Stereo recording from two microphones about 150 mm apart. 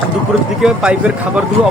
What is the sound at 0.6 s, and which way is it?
Speech, 5° right (ahead or behind).